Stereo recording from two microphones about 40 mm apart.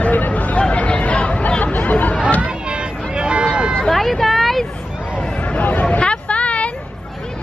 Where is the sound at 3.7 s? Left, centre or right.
Centre.